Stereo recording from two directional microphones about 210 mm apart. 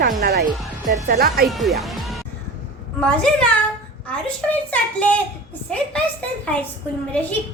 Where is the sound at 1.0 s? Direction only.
45° right (ahead or behind).